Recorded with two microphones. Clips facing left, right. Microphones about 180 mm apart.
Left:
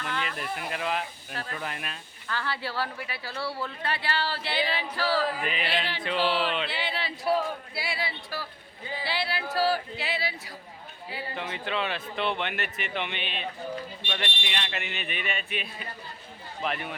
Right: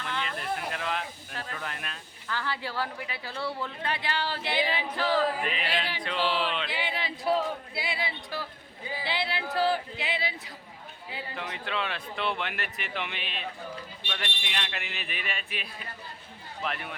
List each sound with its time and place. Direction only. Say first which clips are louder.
0.2 s speech: even; 5° left (ahead or behind)
2.3 s speech: left 1 dB; 15° right (ahead or behind)
5.4 s speech: left 1 dB; centre (ahead or behind)
6.7 s speech: even; 10° right (ahead or behind)
11.3 s speech: left 2 dB; centre (ahead or behind)